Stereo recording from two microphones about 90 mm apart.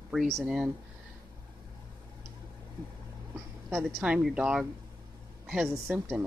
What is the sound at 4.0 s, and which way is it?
Speech, 10° right (ahead or behind).